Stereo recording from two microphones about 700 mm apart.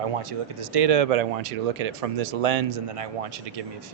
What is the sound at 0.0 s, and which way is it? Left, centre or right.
Speech, right.